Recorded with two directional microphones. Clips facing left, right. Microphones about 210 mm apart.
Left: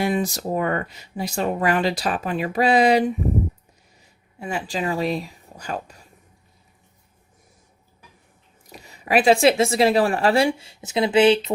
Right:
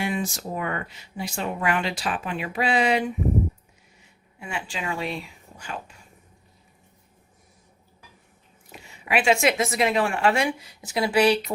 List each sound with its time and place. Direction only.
0.0 s speech: 40° left (ahead or behind)
4.4 s speech: 40° left (ahead or behind)
8.7 s speech: 40° left (ahead or behind); by 11.5 s 25° left (ahead or behind)